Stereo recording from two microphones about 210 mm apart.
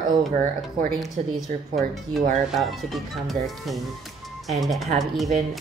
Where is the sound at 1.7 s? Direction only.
Centre (ahead or behind).